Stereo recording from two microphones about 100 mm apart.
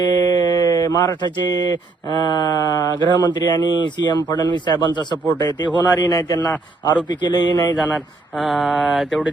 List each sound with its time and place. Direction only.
0.0 s speech: 45° left (ahead or behind)
7.8 s speech: centre (ahead or behind)